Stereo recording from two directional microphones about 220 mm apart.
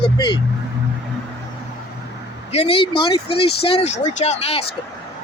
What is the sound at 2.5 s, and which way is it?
Speech, 25° left (ahead or behind).